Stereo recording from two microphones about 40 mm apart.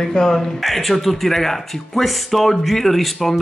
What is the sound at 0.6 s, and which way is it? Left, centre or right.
Speech, centre.